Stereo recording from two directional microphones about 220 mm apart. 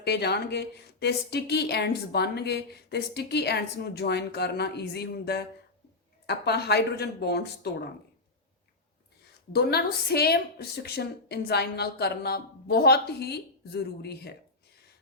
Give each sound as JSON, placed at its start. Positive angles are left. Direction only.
{"t": 0.0, "sound": "a woman's voice", "side_deg": 50}
{"t": 9.5, "sound": "a woman's voice", "side_deg": 45}